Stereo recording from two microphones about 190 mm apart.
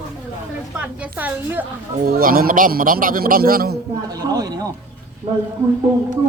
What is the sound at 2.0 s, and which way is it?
A man's voice, 50° right (ahead or behind).